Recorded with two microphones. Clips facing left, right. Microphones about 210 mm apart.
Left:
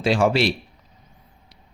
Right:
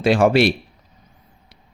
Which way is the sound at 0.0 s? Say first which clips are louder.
Right 4 dB; 55° right (ahead or behind).